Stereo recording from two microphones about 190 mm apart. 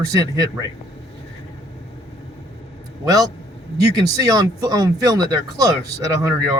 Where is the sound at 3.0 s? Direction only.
20° right (ahead or behind).